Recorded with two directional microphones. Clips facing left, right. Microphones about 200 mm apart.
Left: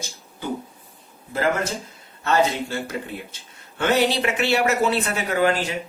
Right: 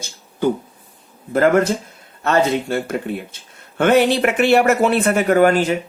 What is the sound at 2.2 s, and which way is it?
Speech, 55° right (ahead or behind).